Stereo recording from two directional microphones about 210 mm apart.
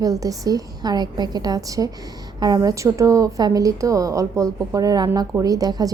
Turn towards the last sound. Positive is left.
turn(degrees=-15)  # may be behind; listen again after turning